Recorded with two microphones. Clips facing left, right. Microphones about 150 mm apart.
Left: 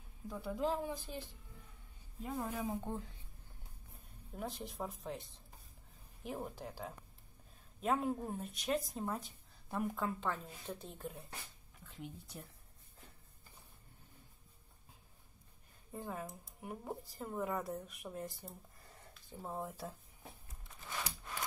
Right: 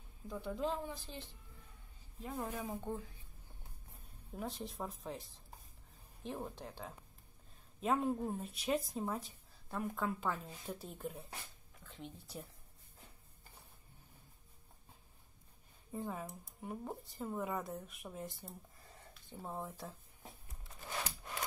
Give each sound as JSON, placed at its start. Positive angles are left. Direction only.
{"t": 0.3, "sound": "speech", "side_deg": 5}
{"t": 0.8, "sound": "speech", "side_deg": 15}
{"t": 2.2, "sound": "speech", "side_deg": 5}
{"t": 4.4, "sound": "speech", "side_deg": 0}
{"t": 15.9, "sound": "speech", "side_deg": 0}